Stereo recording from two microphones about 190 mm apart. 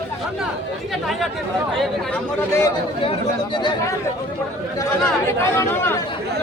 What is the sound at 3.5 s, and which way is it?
Speech, 25° left (ahead or behind).